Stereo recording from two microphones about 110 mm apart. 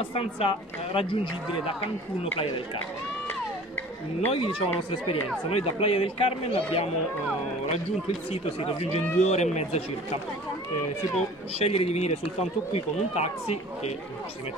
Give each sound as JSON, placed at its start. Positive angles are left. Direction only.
{"t": 0.0, "sound": "speech", "side_deg": 60}
{"t": 4.3, "sound": "speech", "side_deg": 55}
{"t": 8.3, "sound": "speech", "side_deg": 65}
{"t": 11.5, "sound": "speech", "side_deg": 70}